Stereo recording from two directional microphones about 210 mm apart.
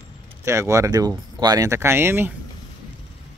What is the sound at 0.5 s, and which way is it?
Speech, 15° right (ahead or behind).